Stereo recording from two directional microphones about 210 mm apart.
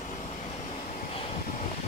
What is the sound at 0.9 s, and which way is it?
Vehicle, 35° left (ahead or behind).